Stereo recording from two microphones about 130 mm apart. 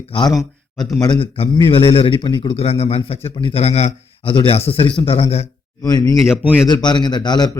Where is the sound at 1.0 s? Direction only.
35° left (ahead or behind).